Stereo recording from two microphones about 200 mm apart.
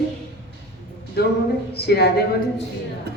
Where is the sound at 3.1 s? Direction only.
55° right (ahead or behind).